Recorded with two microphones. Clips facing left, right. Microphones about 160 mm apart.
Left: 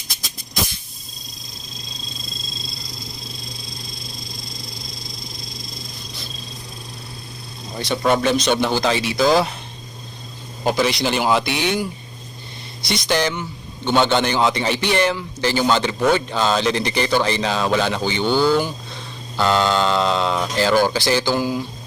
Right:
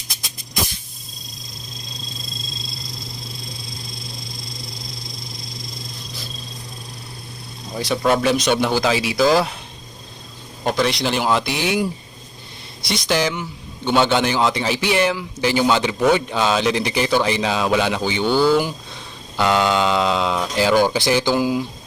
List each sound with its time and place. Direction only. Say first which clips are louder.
7.8 s a man's voice: even; centre (ahead or behind)
10.6 s a man's voice: left 1 dB; centre (ahead or behind)
12.8 s a man's voice: even; centre (ahead or behind)
20.9 s speech: right 1 dB; 20° right (ahead or behind)